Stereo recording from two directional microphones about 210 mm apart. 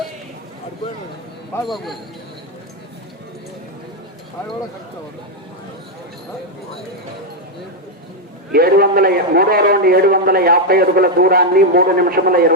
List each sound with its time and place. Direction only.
1.6 s a man's voice: centre (ahead or behind)
8.5 s a man's voice: 45° right (ahead or behind)